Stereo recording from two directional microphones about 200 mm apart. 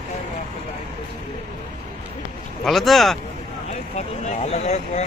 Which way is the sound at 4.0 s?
35° left (ahead or behind).